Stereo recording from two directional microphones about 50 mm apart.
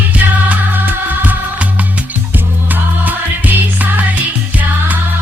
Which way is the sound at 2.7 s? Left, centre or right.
Right.